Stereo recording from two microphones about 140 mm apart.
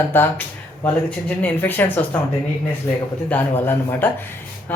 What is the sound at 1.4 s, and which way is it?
Speech, 10° left (ahead or behind).